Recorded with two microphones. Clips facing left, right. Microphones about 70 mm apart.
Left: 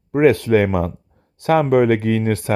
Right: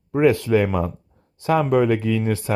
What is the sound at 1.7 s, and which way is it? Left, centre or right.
Speech, left.